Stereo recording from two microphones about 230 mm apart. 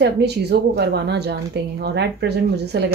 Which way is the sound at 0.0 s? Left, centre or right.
Right.